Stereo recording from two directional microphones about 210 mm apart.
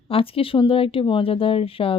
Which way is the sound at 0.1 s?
25° left (ahead or behind).